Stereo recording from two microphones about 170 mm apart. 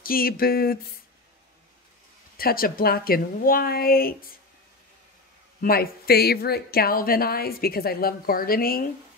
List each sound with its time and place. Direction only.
0.0 s speech: 60° left (ahead or behind)
2.3 s speech: 60° left (ahead or behind)
5.6 s speech: 65° left (ahead or behind)